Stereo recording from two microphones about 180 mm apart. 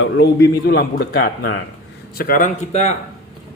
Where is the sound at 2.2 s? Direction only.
50° left (ahead or behind).